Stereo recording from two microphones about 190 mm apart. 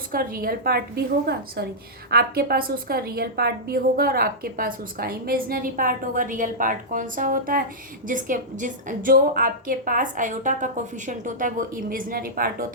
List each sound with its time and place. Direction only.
0.1 s a woman's voice: 50° right (ahead or behind)